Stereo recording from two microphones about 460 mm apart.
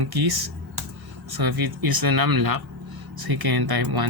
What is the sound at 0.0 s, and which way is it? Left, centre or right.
Speech, right.